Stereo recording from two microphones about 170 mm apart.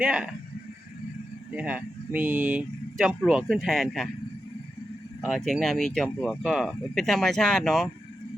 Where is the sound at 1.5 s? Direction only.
10° right (ahead or behind).